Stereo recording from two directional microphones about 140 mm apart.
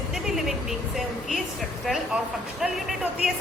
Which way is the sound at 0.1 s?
Centre (ahead or behind).